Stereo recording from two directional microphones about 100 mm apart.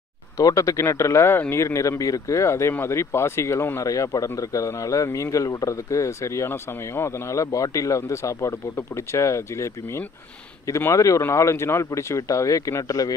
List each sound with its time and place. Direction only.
0.4 s a man's voice: 35° left (ahead or behind)